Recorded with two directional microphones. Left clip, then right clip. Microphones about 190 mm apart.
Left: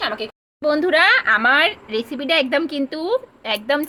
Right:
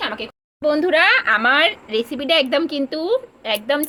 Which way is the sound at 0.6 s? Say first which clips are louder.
Even; 5° left (ahead or behind).